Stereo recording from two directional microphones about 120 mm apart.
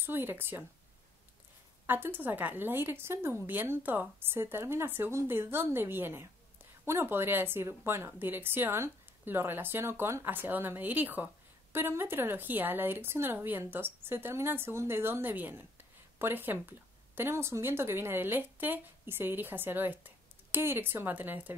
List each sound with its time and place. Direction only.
0.0 s speech: 20° right (ahead or behind)
1.9 s speech: 15° right (ahead or behind)